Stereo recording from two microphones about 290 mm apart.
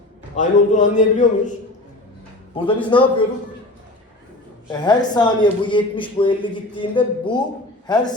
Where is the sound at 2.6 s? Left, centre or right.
Centre.